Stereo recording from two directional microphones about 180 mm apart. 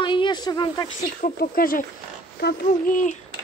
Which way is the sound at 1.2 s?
50° left (ahead or behind).